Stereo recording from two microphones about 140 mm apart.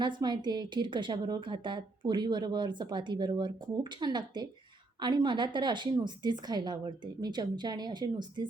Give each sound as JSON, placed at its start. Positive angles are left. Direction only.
{"t": 0.0, "sound": "a woman's voice", "side_deg": -30}